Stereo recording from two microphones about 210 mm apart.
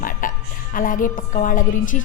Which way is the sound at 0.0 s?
40° left (ahead or behind).